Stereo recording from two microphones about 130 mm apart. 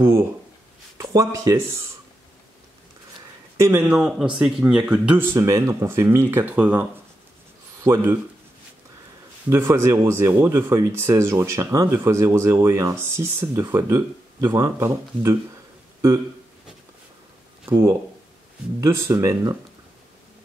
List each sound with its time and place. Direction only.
0.0 s speech: 20° right (ahead or behind)
3.5 s speech: 20° right (ahead or behind)
3.8 s speech: 5° right (ahead or behind)
9.5 s speech: 20° right (ahead or behind)
17.6 s speech: 20° right (ahead or behind)